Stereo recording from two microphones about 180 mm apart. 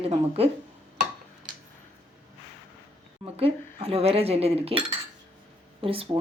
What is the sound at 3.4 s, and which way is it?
Speech, 35° right (ahead or behind).